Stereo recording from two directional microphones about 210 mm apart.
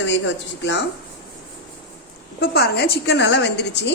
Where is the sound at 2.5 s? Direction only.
50° left (ahead or behind).